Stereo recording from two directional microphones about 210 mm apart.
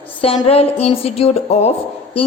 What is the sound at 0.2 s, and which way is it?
A woman's voice, 25° left (ahead or behind).